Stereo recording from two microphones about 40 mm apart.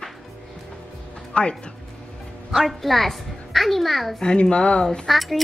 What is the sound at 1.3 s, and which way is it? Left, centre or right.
Speech, left.